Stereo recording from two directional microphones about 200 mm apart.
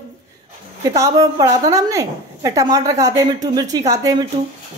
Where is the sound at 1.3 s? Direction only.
20° right (ahead or behind).